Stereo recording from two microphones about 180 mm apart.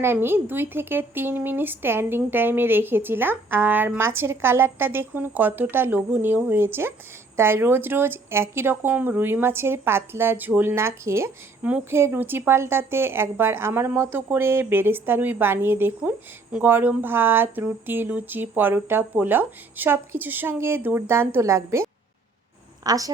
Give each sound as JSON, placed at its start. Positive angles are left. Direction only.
{"t": 0.0, "sound": "a woman's voice", "side_deg": -10}